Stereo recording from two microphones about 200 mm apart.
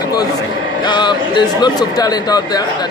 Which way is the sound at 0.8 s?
20° left (ahead or behind).